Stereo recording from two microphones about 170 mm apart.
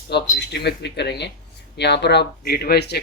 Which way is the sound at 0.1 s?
80° left.